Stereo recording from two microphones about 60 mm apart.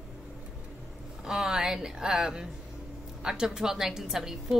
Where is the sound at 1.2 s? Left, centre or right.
Centre.